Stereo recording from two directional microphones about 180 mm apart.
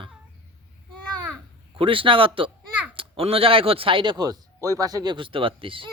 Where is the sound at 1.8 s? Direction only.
30° right (ahead or behind).